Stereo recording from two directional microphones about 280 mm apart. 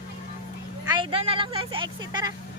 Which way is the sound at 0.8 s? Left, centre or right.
Centre.